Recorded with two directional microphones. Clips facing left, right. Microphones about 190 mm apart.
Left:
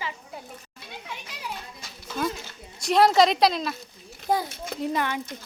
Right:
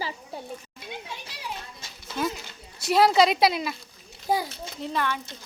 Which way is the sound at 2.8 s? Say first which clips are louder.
Left 1 dB; centre (ahead or behind).